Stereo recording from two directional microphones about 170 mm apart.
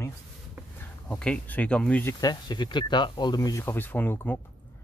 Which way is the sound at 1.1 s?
5° left (ahead or behind).